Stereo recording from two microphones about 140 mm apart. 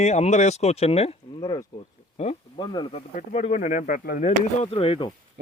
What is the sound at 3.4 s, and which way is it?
Speech, 55° left (ahead or behind).